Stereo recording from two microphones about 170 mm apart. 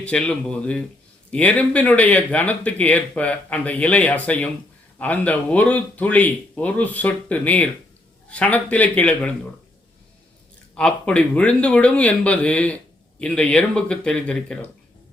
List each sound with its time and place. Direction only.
0.0 s speech: 5° left (ahead or behind)
10.8 s speech: 5° left (ahead or behind)